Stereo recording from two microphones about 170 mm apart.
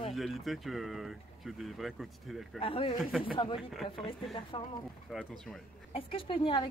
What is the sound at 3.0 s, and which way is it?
Speech, 5° right (ahead or behind).